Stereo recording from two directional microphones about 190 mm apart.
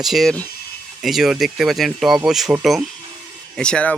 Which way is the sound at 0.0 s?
Centre (ahead or behind).